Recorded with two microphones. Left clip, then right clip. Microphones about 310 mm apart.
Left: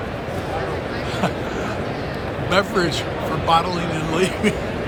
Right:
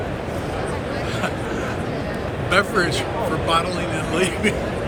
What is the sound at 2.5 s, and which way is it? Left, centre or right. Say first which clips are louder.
Speech: right 1 dB; centre.